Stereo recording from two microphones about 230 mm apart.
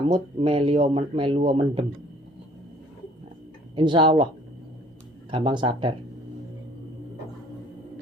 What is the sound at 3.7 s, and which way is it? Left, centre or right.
Speech, right.